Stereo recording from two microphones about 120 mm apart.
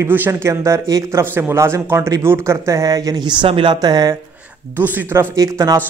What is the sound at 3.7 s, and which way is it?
Speech, 30° right (ahead or behind).